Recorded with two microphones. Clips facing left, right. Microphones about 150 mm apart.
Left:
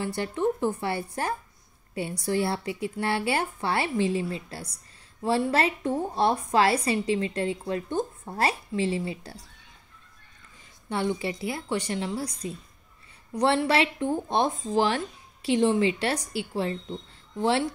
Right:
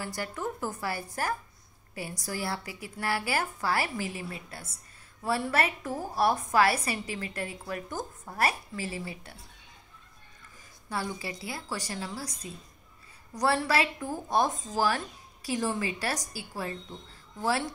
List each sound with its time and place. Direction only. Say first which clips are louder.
0.0 s a woman's voice: left 8 dB; 25° left (ahead or behind)
10.9 s a woman's voice: left 7 dB; 25° left (ahead or behind)
13.3 s a woman's voice: left 4 dB; 25° left (ahead or behind)